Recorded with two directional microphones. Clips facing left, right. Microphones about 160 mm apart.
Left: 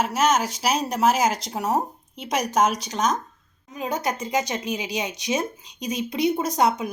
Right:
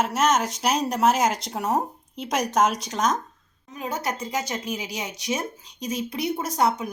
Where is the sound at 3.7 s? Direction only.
15° left (ahead or behind).